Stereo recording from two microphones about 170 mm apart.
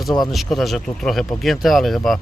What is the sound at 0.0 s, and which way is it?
Speech, centre (ahead or behind).